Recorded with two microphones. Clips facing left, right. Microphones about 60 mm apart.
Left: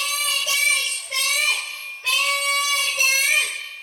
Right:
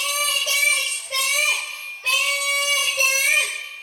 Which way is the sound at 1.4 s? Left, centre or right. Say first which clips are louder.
Right 1 dB; centre.